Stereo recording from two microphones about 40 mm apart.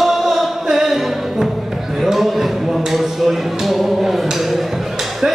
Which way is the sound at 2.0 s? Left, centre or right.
Centre.